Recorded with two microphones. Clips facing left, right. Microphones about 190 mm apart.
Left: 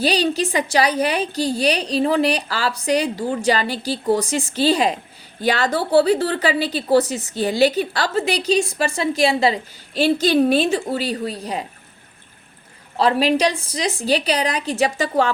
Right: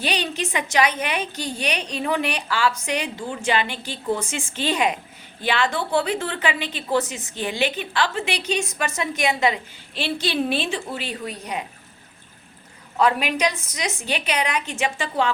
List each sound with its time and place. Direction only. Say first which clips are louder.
0.0 s a woman's voice: left 7 dB; 35° left (ahead or behind)
13.0 s a woman's voice: left 4 dB; 30° left (ahead or behind)